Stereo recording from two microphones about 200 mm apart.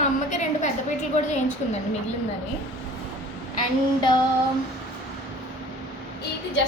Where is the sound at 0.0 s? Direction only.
35° left (ahead or behind).